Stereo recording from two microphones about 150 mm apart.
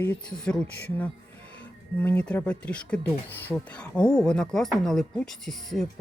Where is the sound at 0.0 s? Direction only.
10° left (ahead or behind).